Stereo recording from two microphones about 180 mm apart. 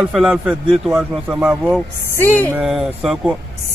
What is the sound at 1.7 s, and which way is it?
Speech, 10° left (ahead or behind).